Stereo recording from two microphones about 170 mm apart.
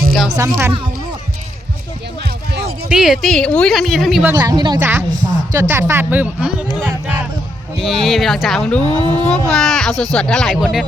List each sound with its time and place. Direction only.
0.3 s speech: 20° right (ahead or behind)
2.9 s speech: centre (ahead or behind)
4.2 s speech: 15° right (ahead or behind)
4.8 s speech: 15° right (ahead or behind); by 8.8 s 5° left (ahead or behind)
8.8 s speech: 25° right (ahead or behind)
9.5 s speech: 5° left (ahead or behind)